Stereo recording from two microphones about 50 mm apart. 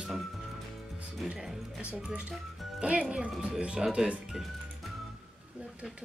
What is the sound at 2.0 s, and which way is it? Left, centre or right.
Speech, right.